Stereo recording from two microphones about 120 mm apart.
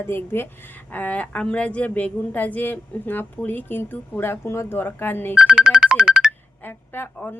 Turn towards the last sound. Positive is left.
turn(degrees=15)  # may be behind; listen again after turning